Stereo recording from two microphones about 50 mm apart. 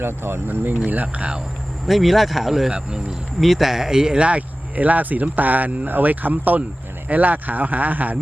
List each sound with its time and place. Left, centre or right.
0.0 s speech: right
1.9 s speech: centre
4.2 s speech: right